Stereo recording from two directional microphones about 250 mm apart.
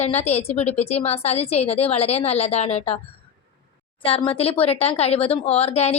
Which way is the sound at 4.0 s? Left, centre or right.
Left.